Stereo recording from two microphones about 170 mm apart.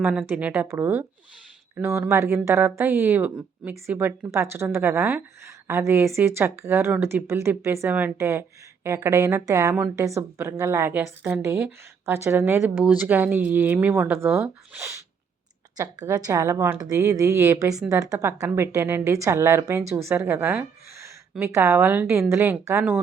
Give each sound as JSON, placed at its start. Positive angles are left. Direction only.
{"t": 0.0, "sound": "a woman's voice", "side_deg": -10}